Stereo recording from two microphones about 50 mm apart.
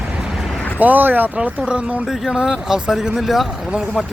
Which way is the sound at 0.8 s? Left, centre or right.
Right.